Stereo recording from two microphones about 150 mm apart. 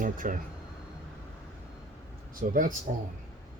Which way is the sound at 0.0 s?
65° right (ahead or behind).